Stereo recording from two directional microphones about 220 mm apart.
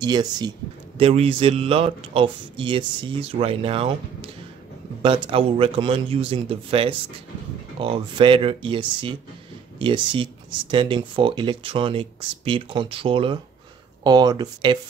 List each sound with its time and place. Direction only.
0.0 s speech: 20° right (ahead or behind)